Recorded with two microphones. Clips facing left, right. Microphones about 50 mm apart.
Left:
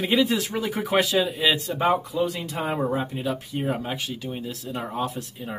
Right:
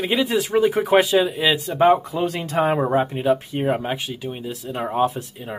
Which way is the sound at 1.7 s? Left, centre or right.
Right.